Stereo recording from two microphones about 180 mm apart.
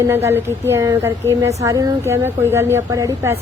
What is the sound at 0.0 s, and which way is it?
Speech, 15° right (ahead or behind).